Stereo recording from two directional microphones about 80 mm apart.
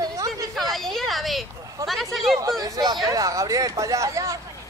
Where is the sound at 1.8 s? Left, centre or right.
Right.